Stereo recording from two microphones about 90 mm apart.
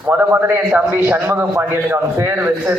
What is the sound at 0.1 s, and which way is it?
A man's voice, 20° right (ahead or behind).